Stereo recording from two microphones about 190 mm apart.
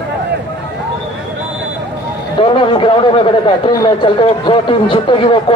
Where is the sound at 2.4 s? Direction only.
25° left (ahead or behind).